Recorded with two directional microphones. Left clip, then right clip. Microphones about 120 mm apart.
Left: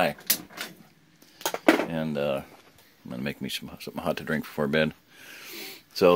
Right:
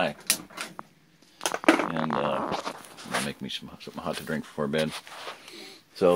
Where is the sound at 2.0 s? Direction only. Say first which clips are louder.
Right 1 dB; 45° left (ahead or behind).